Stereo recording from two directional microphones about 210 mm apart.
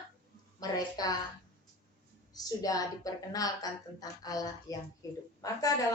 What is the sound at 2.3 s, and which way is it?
A woman's voice, 15° left (ahead or behind).